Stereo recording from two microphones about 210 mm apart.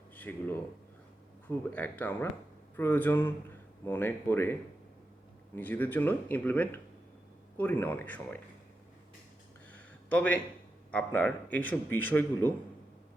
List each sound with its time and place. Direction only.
0.2 s a man's voice: 10° left (ahead or behind)
5.5 s a man's voice: 10° left (ahead or behind)
10.1 s a man's voice: 5° left (ahead or behind)